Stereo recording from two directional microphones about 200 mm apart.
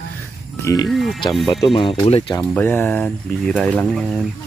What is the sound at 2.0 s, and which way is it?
Speech, 25° left (ahead or behind).